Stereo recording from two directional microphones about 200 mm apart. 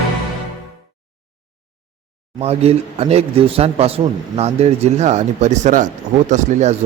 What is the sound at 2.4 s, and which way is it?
A man's voice, 30° right (ahead or behind).